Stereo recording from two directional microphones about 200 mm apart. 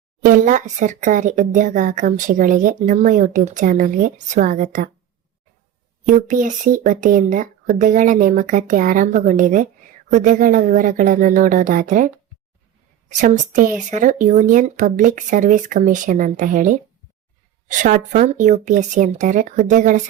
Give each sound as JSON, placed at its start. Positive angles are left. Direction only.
{"t": 0.2, "sound": "speech", "side_deg": -40}
{"t": 6.1, "sound": "speech", "side_deg": -40}